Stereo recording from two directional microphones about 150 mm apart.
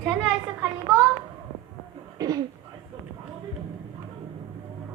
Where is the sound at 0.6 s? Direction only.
15° right (ahead or behind).